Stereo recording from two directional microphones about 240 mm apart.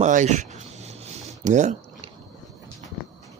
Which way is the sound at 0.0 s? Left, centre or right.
Right.